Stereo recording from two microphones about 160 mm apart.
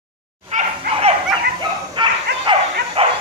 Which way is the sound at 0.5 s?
50° right (ahead or behind).